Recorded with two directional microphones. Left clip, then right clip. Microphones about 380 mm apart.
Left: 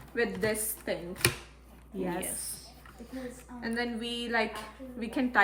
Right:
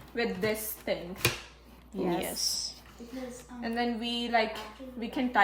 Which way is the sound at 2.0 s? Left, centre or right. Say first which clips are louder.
Right 4 dB; centre.